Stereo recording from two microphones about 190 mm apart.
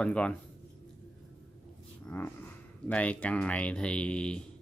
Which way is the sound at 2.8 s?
5° left (ahead or behind).